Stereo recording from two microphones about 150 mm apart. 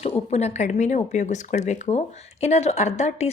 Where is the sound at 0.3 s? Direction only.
45° left (ahead or behind).